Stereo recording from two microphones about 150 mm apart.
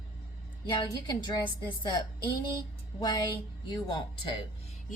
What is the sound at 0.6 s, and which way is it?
Speech, 30° left (ahead or behind).